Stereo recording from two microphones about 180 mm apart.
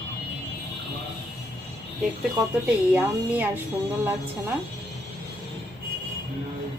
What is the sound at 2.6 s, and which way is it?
Speech, 10° right (ahead or behind).